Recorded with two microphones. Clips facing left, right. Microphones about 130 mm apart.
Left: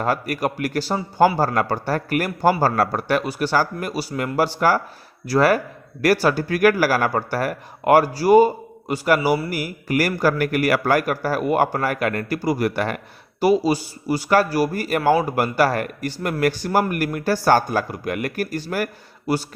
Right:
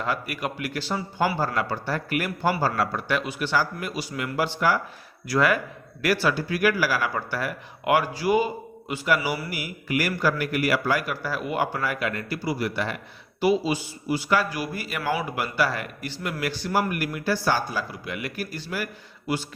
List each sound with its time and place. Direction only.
0.0 s a man's voice: 45° left (ahead or behind)
13.4 s a man's voice: 40° left (ahead or behind)